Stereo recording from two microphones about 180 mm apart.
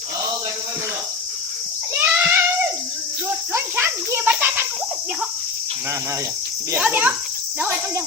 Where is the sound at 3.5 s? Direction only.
15° right (ahead or behind).